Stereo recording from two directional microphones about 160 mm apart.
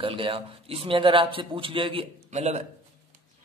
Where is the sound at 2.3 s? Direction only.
45° right (ahead or behind).